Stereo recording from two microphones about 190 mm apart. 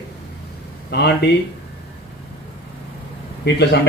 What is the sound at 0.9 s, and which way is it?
Speech, 60° left (ahead or behind).